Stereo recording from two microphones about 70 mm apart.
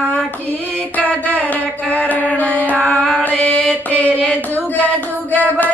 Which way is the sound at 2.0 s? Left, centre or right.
Left.